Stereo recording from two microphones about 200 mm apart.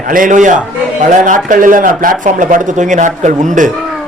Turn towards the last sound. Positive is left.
turn(degrees=-40)  # may be behind; listen again after turning